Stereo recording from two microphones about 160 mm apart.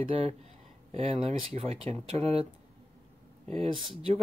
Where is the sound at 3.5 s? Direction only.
40° right (ahead or behind).